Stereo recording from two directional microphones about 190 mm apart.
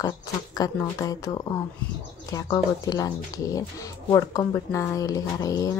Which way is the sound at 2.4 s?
20° left (ahead or behind).